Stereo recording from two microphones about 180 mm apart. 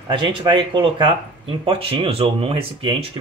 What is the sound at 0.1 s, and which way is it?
Speech, 30° right (ahead or behind).